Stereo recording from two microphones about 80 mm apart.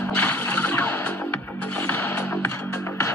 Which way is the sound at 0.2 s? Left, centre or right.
Left.